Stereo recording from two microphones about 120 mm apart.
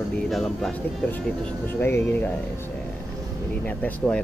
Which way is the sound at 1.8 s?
15° left (ahead or behind).